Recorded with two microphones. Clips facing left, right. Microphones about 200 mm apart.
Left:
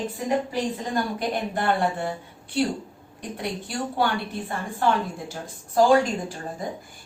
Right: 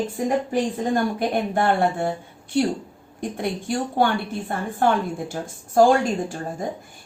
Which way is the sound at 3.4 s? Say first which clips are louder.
Right 4 dB; 50° right (ahead or behind).